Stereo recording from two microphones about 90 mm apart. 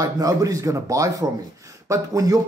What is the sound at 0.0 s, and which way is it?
Speech, 45° right (ahead or behind).